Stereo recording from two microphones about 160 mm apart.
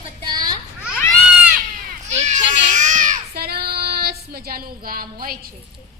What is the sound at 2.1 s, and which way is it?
Baby cry, 45° right (ahead or behind).